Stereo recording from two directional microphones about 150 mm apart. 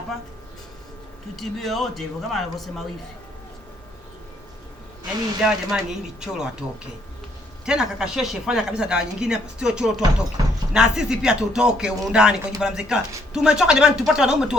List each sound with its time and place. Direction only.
1.4 s speech: centre (ahead or behind)
5.4 s speech: 5° right (ahead or behind)
10.4 s a sound: 25° right (ahead or behind)
10.8 s speech: 5° right (ahead or behind)